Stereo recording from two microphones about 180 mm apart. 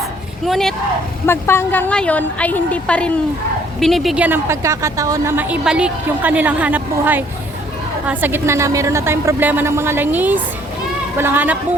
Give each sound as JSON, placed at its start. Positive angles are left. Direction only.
{"t": 0.4, "sound": "speech", "side_deg": 0}
{"t": 1.3, "sound": "a woman's voice", "side_deg": 15}